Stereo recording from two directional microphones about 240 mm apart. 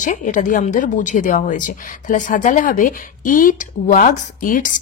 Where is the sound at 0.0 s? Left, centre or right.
Left.